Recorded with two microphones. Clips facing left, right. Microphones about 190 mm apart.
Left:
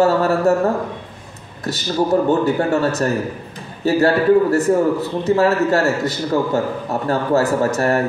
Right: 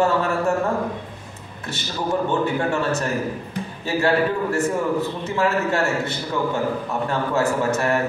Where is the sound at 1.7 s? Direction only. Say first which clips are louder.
Left 7 dB; 40° left (ahead or behind).